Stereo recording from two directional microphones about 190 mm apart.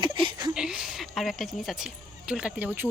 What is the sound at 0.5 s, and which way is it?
Speech, 5° right (ahead or behind).